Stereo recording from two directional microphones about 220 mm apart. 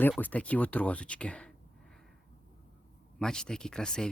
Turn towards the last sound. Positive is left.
turn(degrees=5)  # may be behind; listen again after turning